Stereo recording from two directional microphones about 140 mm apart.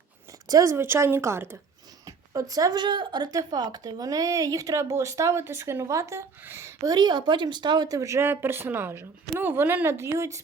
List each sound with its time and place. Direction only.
0.4 s speech: 25° right (ahead or behind)